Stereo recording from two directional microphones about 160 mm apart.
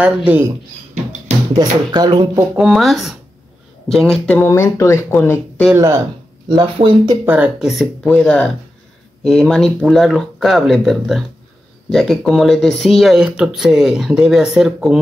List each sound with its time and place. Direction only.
0.0 s speech: 10° right (ahead or behind)
1.6 s speech: 25° right (ahead or behind)
2.5 s speech: centre (ahead or behind); by 5.4 s 15° left (ahead or behind)
6.5 s speech: 25° right (ahead or behind)
7.2 s speech: 10° right (ahead or behind)